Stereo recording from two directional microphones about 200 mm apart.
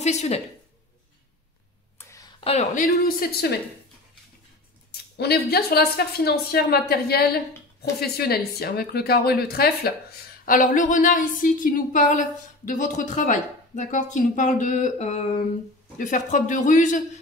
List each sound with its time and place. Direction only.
0.0 s a woman's voice: 35° left (ahead or behind)
2.0 s a sound: 15° left (ahead or behind)
2.4 s a woman's voice: 35° left (ahead or behind)
5.1 s a woman's voice: 55° left (ahead or behind)